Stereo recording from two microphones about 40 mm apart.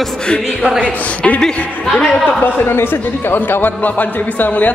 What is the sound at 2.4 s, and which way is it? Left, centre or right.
A man's voice, left.